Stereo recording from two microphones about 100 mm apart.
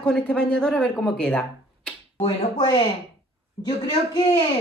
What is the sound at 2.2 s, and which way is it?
Speech, 45° left (ahead or behind).